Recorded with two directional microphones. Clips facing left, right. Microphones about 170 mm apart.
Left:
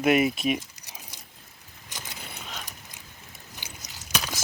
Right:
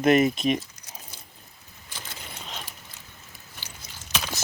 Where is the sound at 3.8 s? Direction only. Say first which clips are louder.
Left 1 dB; 40° left (ahead or behind).